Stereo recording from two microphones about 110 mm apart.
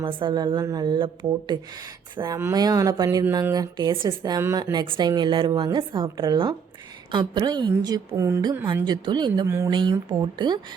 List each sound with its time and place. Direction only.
0.0 s a woman's voice: 50° right (ahead or behind); by 8.4 s 30° right (ahead or behind)
8.8 s a woman's voice: 45° right (ahead or behind)